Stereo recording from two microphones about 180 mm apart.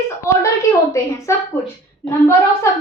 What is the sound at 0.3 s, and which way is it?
A woman's voice, 15° left (ahead or behind).